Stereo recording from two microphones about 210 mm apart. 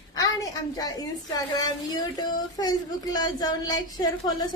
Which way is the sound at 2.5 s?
20° left (ahead or behind).